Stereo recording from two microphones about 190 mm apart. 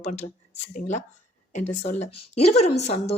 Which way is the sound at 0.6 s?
40° left (ahead or behind).